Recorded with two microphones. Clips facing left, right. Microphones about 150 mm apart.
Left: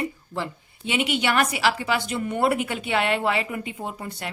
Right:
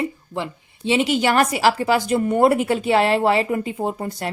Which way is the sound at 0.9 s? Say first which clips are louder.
Right 6 dB; 35° right (ahead or behind).